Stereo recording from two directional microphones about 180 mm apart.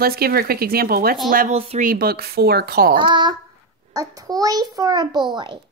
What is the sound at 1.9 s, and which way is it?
Speech, 60° right (ahead or behind).